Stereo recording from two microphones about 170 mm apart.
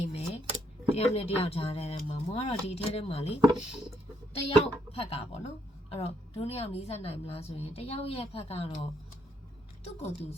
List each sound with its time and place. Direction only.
0.0 s a sound: 35° left (ahead or behind)
0.9 s a woman's voice: 35° left (ahead or behind)
3.5 s speech: centre (ahead or behind)
4.4 s a woman's voice: 35° left (ahead or behind)